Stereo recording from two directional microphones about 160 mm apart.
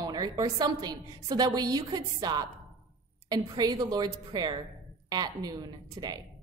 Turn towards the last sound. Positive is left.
turn(degrees=-25)  # may be behind; listen again after turning